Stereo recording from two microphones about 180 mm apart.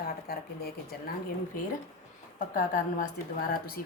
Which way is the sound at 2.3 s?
50° left (ahead or behind).